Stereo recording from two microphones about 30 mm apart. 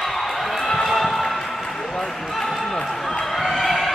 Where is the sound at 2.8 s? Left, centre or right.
Centre.